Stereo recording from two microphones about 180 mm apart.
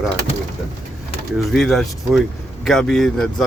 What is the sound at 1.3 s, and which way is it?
Speech, centre (ahead or behind).